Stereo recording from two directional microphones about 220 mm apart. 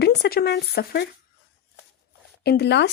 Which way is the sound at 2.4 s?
50° left (ahead or behind).